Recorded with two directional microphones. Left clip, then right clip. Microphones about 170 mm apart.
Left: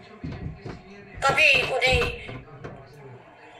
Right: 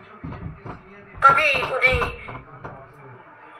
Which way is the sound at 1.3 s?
15° left (ahead or behind).